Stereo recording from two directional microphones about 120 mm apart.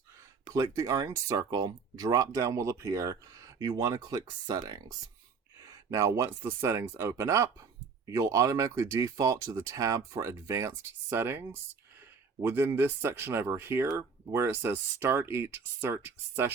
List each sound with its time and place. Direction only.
0.5 s speech: 30° right (ahead or behind)